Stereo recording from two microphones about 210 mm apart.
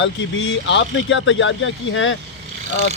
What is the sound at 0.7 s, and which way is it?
Speech, 65° left (ahead or behind).